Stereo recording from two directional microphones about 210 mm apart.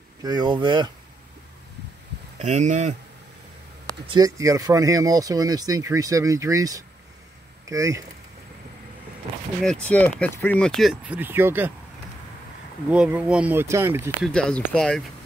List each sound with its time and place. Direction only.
0.2 s speech: 20° right (ahead or behind)
2.3 s speech: 35° right (ahead or behind)
4.1 s speech: 15° right (ahead or behind)
9.6 s speech: 5° left (ahead or behind)
12.9 s speech: 5° right (ahead or behind)
14.2 s speech: 5° left (ahead or behind)